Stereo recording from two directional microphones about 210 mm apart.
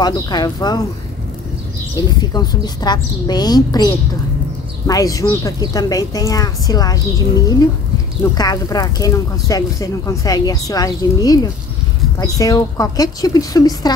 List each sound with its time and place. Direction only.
0.0 s a woman's voice: 20° left (ahead or behind)
2.3 s a woman's voice: 20° left (ahead or behind)